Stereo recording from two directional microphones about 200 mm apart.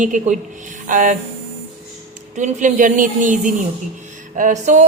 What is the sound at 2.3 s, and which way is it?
Speech, 40° right (ahead or behind).